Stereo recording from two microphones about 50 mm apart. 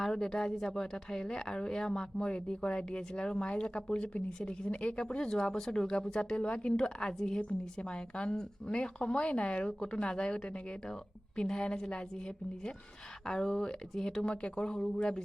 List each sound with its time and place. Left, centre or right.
0.0 s a woman's voice: centre